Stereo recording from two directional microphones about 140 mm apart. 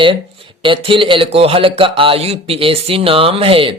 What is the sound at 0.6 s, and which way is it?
A man's voice, 40° right (ahead or behind).